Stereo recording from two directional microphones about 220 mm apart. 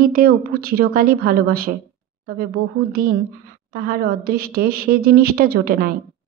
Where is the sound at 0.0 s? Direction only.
40° right (ahead or behind).